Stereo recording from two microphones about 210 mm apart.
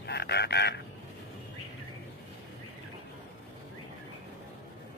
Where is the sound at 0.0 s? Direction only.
50° left (ahead or behind).